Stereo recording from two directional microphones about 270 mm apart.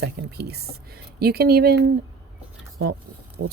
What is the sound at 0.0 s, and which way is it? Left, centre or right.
Speech, right.